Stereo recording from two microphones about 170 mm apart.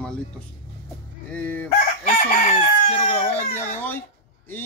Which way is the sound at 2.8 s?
45° left (ahead or behind).